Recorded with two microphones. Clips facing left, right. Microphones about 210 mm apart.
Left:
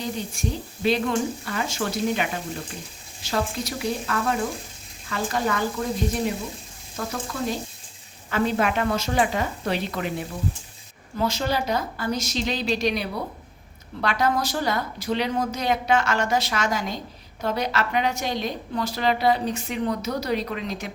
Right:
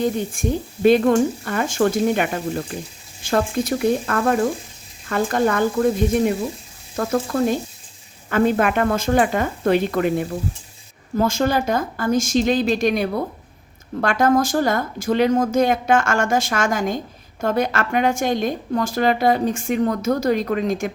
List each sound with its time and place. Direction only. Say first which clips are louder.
0.0 s a woman's voice: right 8 dB; 50° right (ahead or behind)